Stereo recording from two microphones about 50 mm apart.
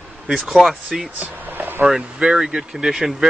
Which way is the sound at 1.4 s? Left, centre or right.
Right.